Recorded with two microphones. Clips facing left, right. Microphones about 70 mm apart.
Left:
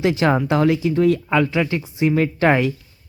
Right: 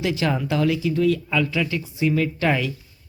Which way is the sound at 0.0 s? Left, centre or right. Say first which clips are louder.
Left 5 dB; left.